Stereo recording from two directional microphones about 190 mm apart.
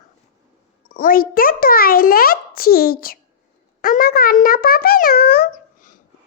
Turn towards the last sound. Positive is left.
turn(degrees=45)  # may be behind; listen again after turning